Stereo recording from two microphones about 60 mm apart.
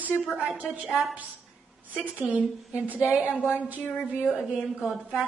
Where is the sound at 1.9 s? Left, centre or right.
Right.